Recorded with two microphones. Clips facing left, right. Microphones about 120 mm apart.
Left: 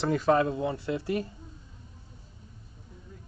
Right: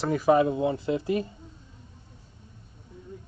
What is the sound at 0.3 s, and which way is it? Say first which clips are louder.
Speech: right 5 dB; 20° right (ahead or behind).